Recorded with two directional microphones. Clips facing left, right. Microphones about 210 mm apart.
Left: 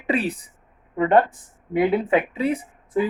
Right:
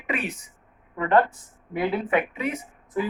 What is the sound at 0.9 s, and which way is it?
Speech, 20° left (ahead or behind).